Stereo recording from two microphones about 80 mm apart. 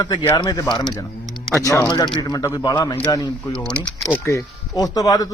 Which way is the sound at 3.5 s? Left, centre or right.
Centre.